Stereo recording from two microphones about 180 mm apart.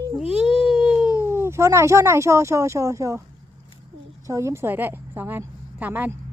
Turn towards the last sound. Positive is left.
turn(degrees=-10)  # may be behind; listen again after turning